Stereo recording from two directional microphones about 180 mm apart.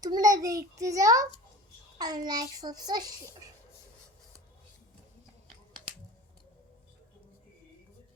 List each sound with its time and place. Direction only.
0.0 s a child's voice: 20° right (ahead or behind)